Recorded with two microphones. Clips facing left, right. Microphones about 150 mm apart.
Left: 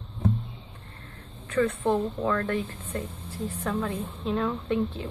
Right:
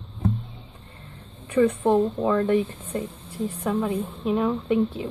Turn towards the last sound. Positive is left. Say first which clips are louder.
# right 5 dB
turn(degrees=-15)  # may be behind; listen again after turning